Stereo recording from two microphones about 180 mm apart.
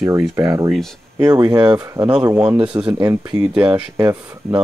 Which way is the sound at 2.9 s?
20° right (ahead or behind).